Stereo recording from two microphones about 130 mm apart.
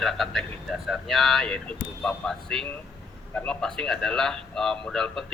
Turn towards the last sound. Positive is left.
turn(degrees=5)  # may be behind; listen again after turning